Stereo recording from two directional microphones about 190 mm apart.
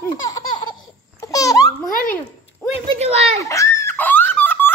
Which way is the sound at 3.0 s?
35° right (ahead or behind).